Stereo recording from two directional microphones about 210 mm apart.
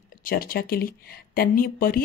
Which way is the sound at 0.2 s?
45° left (ahead or behind).